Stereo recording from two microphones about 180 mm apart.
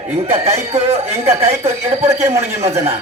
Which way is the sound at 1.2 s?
15° right (ahead or behind).